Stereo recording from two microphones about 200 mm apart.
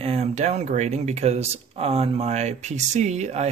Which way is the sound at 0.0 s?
30° right (ahead or behind).